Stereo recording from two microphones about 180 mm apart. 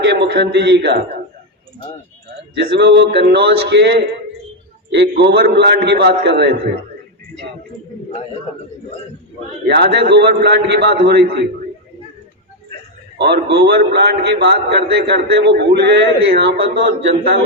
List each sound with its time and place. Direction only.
0.0 s a man's voice: 75° right (ahead or behind)
2.7 s a man's voice: 75° right (ahead or behind)
9.6 s a man's voice: 70° right (ahead or behind)
13.1 s a man's voice: 65° right (ahead or behind)